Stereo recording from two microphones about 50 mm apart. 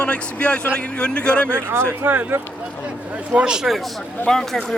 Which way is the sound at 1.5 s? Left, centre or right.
Right.